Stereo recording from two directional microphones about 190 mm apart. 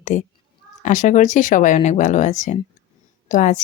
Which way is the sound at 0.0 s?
40° left (ahead or behind).